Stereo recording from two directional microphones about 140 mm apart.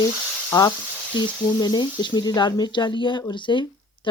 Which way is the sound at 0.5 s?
20° left (ahead or behind).